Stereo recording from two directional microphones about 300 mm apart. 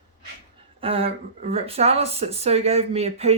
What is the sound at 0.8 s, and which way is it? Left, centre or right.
Speech, centre.